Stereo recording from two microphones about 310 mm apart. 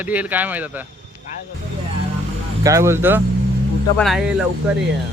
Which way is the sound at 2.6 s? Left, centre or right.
Centre.